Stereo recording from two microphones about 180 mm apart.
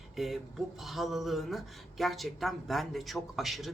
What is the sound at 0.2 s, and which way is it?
Speech, centre (ahead or behind).